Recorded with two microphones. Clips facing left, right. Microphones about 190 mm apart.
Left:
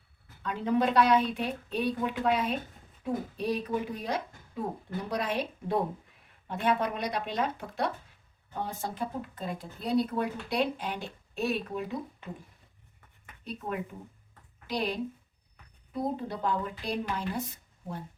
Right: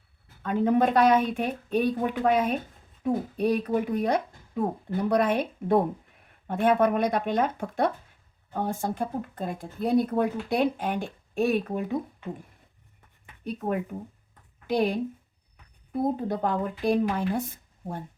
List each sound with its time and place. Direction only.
0.4 s speech: 50° right (ahead or behind)
13.4 s speech: 50° right (ahead or behind)